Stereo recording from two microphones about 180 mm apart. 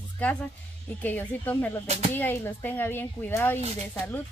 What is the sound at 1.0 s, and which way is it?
A woman's voice, 10° left (ahead or behind).